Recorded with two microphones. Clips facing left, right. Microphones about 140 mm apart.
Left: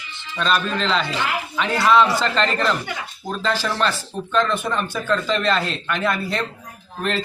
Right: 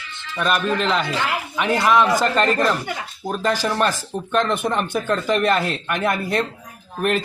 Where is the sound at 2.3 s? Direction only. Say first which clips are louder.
Right 2 dB; 45° right (ahead or behind).